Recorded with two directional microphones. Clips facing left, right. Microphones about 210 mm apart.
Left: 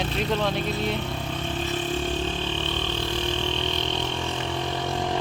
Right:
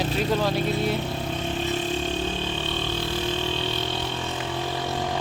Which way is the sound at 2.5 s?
10° right (ahead or behind).